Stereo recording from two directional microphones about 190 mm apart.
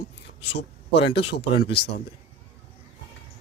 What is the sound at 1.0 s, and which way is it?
Speech, 65° left (ahead or behind).